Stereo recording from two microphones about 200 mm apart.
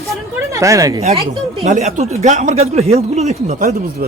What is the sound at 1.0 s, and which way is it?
Speech, 30° right (ahead or behind).